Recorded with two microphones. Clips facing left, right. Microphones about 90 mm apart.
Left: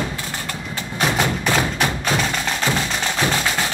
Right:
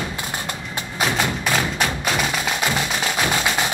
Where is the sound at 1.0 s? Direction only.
Centre (ahead or behind).